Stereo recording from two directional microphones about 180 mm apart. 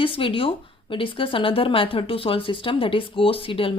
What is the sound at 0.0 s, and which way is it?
A woman's voice, 30° left (ahead or behind).